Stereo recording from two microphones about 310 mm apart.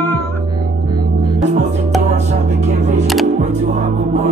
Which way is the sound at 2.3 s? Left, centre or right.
Right.